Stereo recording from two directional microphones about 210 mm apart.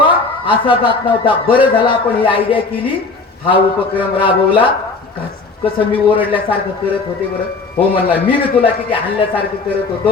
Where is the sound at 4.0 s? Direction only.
25° left (ahead or behind).